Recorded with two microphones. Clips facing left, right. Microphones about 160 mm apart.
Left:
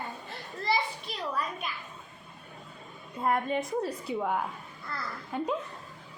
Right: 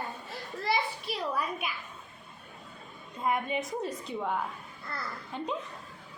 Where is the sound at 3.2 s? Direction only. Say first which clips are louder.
Left 2 dB; 5° right (ahead or behind).